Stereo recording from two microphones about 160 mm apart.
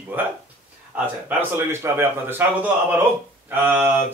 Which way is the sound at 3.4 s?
10° right (ahead or behind).